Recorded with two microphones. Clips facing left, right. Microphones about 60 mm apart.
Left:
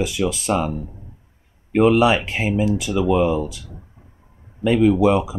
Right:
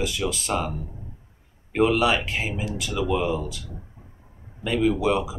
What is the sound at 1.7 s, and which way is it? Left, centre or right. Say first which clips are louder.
Speech: left 5 dB; centre.